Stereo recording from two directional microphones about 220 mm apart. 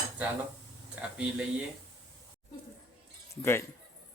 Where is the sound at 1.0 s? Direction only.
5° right (ahead or behind).